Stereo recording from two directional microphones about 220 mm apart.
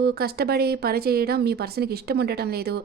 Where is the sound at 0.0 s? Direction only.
45° right (ahead or behind).